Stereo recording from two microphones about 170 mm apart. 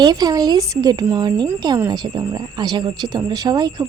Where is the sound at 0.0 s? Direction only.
25° right (ahead or behind).